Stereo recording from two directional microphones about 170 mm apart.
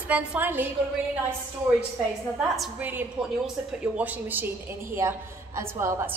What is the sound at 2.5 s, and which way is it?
Speech, centre (ahead or behind).